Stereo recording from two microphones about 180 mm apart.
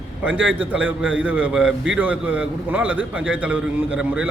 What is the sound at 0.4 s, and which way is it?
A man's voice, 5° right (ahead or behind).